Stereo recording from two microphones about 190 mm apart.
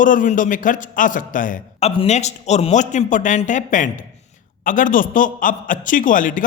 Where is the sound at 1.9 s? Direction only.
30° left (ahead or behind).